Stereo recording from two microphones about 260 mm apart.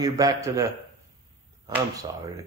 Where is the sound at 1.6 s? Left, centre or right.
Centre.